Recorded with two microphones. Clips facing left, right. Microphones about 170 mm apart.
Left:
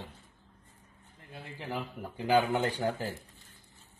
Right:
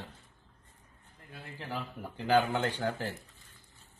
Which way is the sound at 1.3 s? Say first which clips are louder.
Left 2 dB; 20° left (ahead or behind).